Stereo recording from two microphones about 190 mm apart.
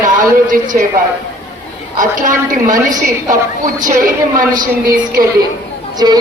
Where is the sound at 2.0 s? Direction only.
45° right (ahead or behind).